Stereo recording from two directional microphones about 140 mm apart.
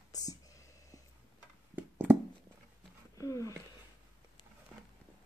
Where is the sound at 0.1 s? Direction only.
25° left (ahead or behind).